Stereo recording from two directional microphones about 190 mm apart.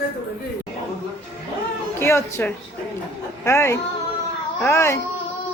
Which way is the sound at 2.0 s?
15° left (ahead or behind).